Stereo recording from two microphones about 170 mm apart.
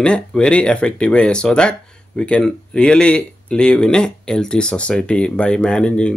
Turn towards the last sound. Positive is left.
turn(degrees=5)  # may be behind; listen again after turning